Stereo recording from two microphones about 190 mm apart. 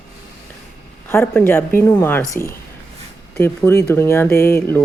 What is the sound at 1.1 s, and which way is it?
Speech, 10° left (ahead or behind).